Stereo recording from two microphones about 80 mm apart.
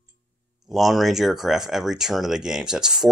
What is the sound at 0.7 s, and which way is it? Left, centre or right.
Speech, centre.